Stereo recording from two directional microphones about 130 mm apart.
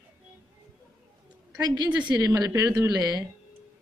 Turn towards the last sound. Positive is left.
turn(degrees=-30)  # may be behind; listen again after turning